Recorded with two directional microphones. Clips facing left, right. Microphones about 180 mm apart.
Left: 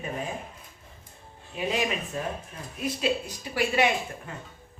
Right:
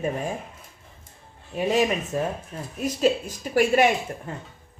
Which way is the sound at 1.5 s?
45° right (ahead or behind).